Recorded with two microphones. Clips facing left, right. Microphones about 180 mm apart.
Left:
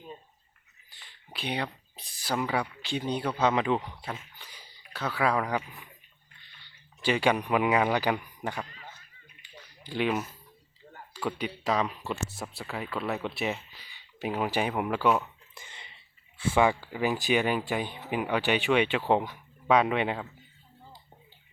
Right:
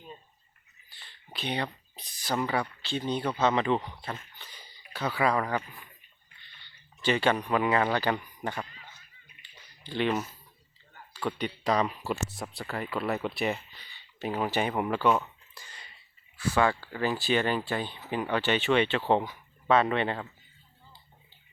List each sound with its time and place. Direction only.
1.0 s speech: 10° left (ahead or behind)
4.9 s speech: centre (ahead or behind)
9.8 s speech: 10° left (ahead or behind)
15.5 s a sound: 25° left (ahead or behind)
16.4 s speech: 20° left (ahead or behind)